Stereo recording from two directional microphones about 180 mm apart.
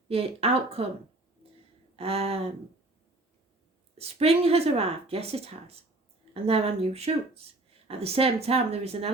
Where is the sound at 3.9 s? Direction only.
35° right (ahead or behind).